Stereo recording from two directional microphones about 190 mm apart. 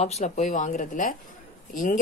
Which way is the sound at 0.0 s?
35° left (ahead or behind).